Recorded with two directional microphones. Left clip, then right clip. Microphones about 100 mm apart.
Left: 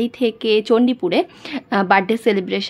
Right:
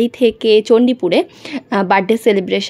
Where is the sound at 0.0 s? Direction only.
40° right (ahead or behind).